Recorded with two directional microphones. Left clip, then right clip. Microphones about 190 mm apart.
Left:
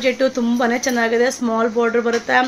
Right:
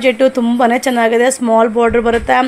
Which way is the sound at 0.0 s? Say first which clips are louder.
Right 6 dB; 35° right (ahead or behind).